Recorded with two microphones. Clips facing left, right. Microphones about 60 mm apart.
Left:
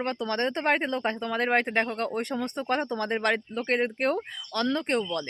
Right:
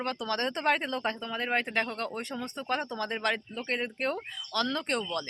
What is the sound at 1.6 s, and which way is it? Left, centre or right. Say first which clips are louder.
Speech: left 4 dB; left.